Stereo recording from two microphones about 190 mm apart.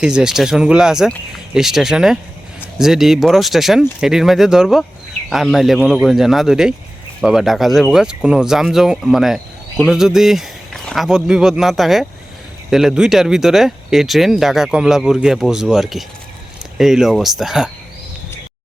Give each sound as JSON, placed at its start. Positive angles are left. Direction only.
{"t": 0.0, "sound": "speech", "side_deg": -5}